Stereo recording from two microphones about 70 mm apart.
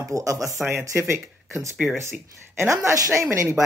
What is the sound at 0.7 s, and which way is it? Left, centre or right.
Speech, right.